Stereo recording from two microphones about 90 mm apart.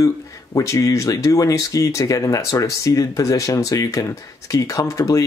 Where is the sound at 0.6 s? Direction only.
40° left (ahead or behind).